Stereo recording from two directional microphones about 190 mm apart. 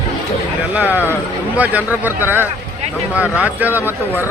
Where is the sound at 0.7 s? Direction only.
10° right (ahead or behind).